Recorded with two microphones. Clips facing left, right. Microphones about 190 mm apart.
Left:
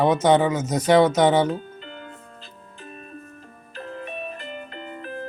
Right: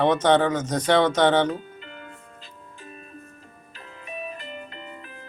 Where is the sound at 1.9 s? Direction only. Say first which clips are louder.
Left 3 dB; 35° left (ahead or behind).